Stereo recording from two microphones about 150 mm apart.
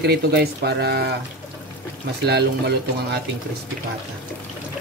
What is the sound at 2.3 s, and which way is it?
Speech, 90° right.